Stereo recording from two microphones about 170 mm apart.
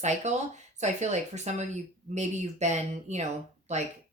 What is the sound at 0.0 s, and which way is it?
A woman's voice, 45° right (ahead or behind).